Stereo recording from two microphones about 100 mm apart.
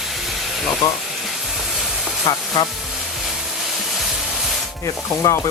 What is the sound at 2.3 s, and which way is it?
Rub, 35° left (ahead or behind).